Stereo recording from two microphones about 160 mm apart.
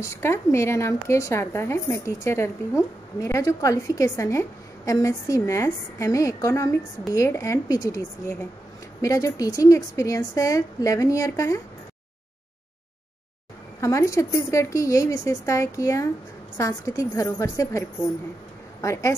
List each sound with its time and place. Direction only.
0.0 s a woman's voice: 15° left (ahead or behind)
13.7 s a woman's voice: 20° left (ahead or behind)